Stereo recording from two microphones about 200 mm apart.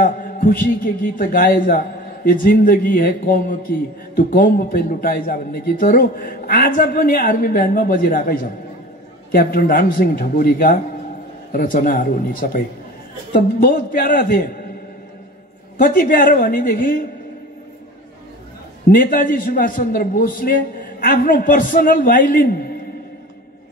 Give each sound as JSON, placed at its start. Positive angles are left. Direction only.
{"t": 0.0, "sound": "a man's voice", "side_deg": 45}
{"t": 15.8, "sound": "a man's voice", "side_deg": 45}
{"t": 18.9, "sound": "a man's voice", "side_deg": 45}